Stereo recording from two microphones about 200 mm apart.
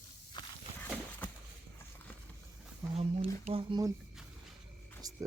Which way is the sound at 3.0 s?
30° right (ahead or behind).